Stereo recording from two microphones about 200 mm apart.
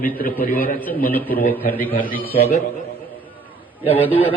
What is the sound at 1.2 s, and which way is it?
A man's voice, 45° left (ahead or behind).